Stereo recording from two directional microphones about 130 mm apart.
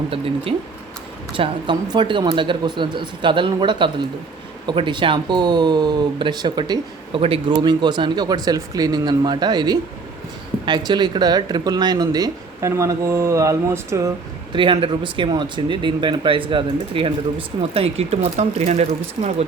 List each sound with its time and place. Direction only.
1.3 s speech: 40° right (ahead or behind); by 14.1 s 25° right (ahead or behind)
14.5 s speech: 40° right (ahead or behind); by 19.5 s 55° right (ahead or behind)